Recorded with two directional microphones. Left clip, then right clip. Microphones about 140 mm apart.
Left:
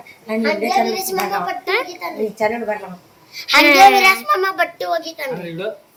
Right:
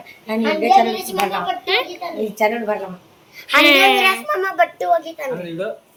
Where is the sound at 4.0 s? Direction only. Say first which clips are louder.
Left 3 dB; 80° left.